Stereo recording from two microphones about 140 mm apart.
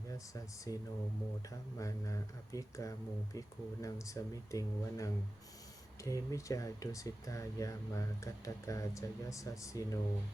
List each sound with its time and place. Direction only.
0.1 s speech: 25° left (ahead or behind)